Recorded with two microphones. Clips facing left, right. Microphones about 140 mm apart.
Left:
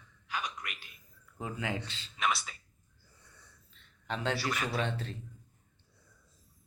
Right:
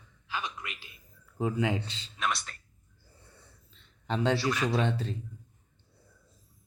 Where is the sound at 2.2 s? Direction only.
Centre (ahead or behind).